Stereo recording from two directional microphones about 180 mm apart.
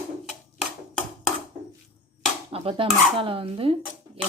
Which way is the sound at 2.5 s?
30° right (ahead or behind).